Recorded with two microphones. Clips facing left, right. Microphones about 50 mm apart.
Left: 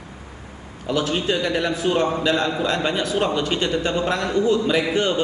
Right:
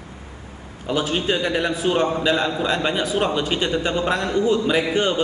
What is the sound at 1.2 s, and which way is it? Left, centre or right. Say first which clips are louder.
A man's voice: even; centre.